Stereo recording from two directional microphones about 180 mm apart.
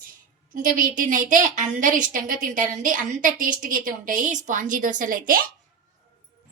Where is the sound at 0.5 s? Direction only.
50° right (ahead or behind).